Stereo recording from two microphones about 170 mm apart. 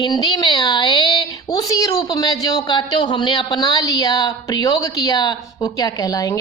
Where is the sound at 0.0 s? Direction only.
25° left (ahead or behind).